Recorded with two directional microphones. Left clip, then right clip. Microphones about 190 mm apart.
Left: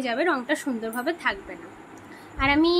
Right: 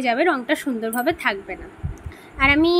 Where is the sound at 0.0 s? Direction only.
15° right (ahead or behind).